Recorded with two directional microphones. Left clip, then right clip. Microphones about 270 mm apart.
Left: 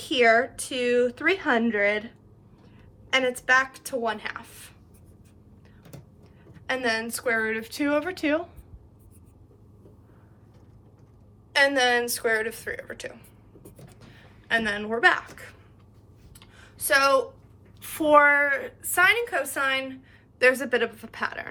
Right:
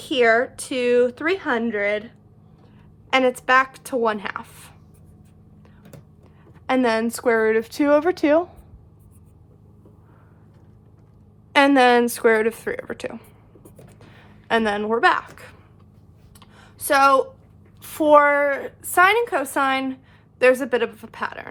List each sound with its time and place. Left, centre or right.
0.0 s speech: centre
3.1 s a woman's voice: centre
6.5 s a woman's voice: centre
11.5 s a woman's voice: right
14.4 s speech: centre
16.6 s a sound: centre
17.8 s speech: centre